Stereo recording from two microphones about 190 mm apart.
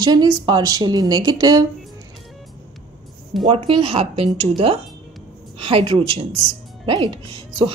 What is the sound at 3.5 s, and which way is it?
A woman's voice, 30° right (ahead or behind).